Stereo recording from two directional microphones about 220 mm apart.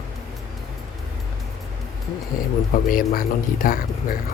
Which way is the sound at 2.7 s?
40° left (ahead or behind).